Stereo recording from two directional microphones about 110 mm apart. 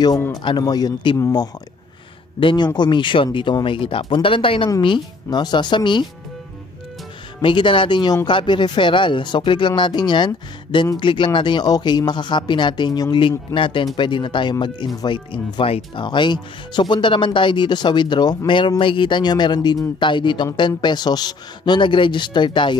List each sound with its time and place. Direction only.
0.4 s speech: 45° left (ahead or behind)
2.4 s speech: 40° left (ahead or behind)
7.4 s speech: 50° left (ahead or behind)